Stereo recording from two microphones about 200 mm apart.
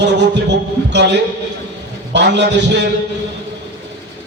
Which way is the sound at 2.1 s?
60° right (ahead or behind).